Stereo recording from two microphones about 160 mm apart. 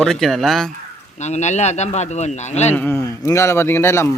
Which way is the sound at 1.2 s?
45° left (ahead or behind).